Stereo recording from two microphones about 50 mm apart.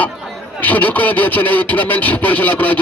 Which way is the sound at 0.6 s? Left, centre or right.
Left.